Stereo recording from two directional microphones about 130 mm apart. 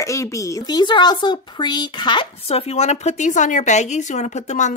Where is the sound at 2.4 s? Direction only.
50° left (ahead or behind).